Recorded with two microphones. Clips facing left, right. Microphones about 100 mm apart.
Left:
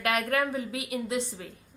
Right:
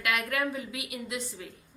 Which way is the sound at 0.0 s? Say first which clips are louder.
Left 3 dB; 35° left (ahead or behind).